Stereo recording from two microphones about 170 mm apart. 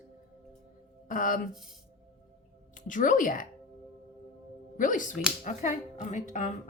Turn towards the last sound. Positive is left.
turn(degrees=45)  # may be behind; listen again after turning